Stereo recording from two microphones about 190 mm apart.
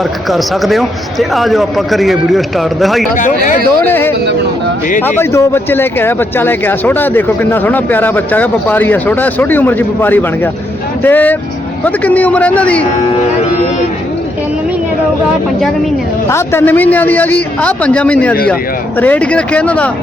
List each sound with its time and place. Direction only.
0.3 s speech: centre (ahead or behind)
3.2 s speech: 40° left (ahead or behind)
3.8 s speech: 10° left (ahead or behind)
16.3 s speech: 10° left (ahead or behind)